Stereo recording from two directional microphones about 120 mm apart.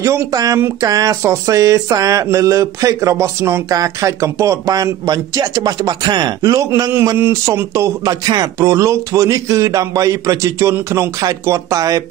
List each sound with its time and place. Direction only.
0.0 s speech: 25° right (ahead or behind)